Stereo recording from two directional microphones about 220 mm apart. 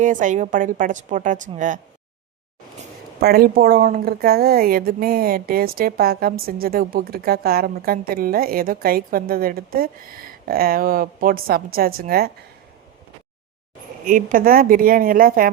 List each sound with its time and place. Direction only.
0.0 s a woman's voice: 35° right (ahead or behind)
3.2 s speech: 45° right (ahead or behind)
14.0 s a woman's voice: 35° right (ahead or behind)